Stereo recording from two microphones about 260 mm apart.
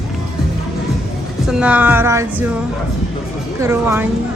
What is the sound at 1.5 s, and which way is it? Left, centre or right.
Music, centre.